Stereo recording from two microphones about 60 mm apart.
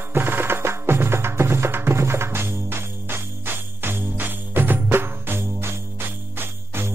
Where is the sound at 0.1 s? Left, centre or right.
Right.